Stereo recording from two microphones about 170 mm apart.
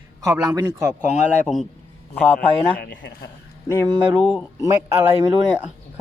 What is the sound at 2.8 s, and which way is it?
Speech, 85° left.